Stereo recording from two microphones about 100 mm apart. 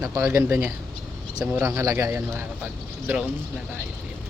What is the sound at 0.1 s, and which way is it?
Speech, 30° right (ahead or behind).